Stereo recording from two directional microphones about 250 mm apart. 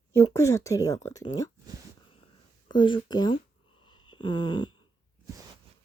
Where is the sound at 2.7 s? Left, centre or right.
Centre.